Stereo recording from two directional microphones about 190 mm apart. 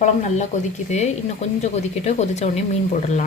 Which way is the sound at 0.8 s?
35° left (ahead or behind).